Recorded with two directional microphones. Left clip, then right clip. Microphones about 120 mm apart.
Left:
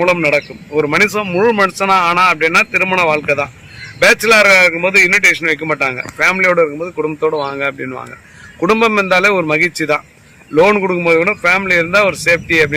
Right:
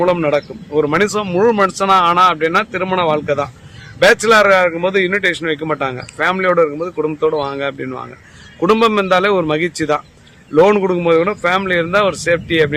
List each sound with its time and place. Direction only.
0.2 s a man's voice: 10° right (ahead or behind)
10.8 s a man's voice: 25° right (ahead or behind)